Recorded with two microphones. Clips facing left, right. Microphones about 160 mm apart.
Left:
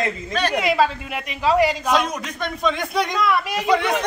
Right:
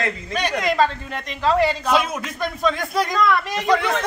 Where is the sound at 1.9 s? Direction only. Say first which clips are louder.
Even; 5° right (ahead or behind).